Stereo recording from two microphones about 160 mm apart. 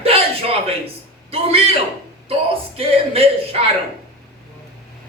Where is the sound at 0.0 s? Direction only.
35° right (ahead or behind).